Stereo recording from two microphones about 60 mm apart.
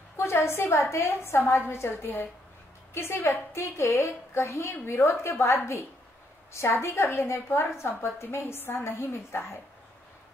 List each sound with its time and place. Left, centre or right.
0.2 s a woman's voice: left